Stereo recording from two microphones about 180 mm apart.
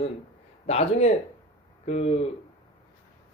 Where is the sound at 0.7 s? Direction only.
35° left (ahead or behind).